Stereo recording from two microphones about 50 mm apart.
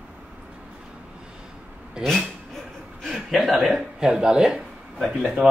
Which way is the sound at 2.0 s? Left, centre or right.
Centre.